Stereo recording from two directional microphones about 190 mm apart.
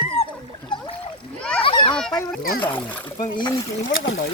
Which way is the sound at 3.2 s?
20° left (ahead or behind).